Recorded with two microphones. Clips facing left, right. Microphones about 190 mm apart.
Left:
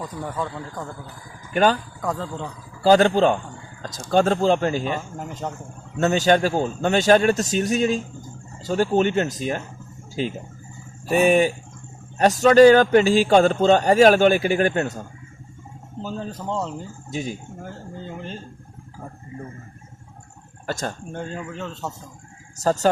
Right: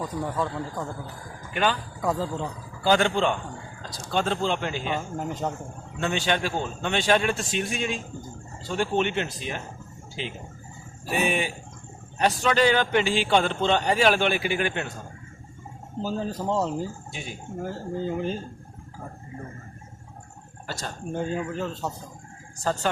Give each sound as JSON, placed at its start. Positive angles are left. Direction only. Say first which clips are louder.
{"t": 0.3, "sound": "a man's voice", "louder": "right 1 dB", "side_deg": 0}
{"t": 1.5, "sound": "a man's voice", "louder": "left 7 dB", "side_deg": 40}
{"t": 2.0, "sound": "a man's voice", "louder": "right 1 dB", "side_deg": -5}
{"t": 2.8, "sound": "a man's voice", "louder": "left 6 dB", "side_deg": 40}
{"t": 4.9, "sound": "a man's voice", "louder": "right 2 dB", "side_deg": 0}
{"t": 6.0, "sound": "a man's voice", "louder": "left 8 dB", "side_deg": 40}
{"t": 11.0, "sound": "speech", "louder": "left 8 dB", "side_deg": 0}
{"t": 11.3, "sound": "a man's voice", "louder": "left 10 dB", "side_deg": 45}
{"t": 16.0, "sound": "a man's voice", "louder": "right 2 dB", "side_deg": -5}
{"t": 17.1, "sound": "speech", "louder": "left 9 dB", "side_deg": 40}
{"t": 17.6, "sound": "a man's voice", "louder": "right 6 dB", "side_deg": -5}
{"t": 20.7, "sound": "a man's voice", "louder": "left 7 dB", "side_deg": 50}
{"t": 21.1, "sound": "a man's voice", "louder": "right 3 dB", "side_deg": -5}
{"t": 22.6, "sound": "a man's voice", "louder": "left 7 dB", "side_deg": 40}